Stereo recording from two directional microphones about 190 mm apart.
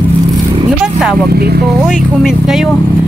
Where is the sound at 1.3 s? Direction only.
55° right (ahead or behind).